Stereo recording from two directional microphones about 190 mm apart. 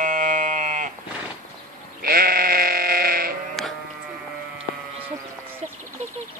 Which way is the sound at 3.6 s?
Centre (ahead or behind).